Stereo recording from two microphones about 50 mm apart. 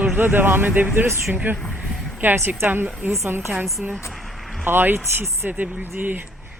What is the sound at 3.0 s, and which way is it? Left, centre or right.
Speech, right.